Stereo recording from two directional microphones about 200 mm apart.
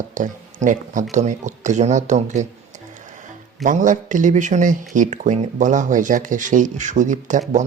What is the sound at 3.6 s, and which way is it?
Speech, 40° right (ahead or behind).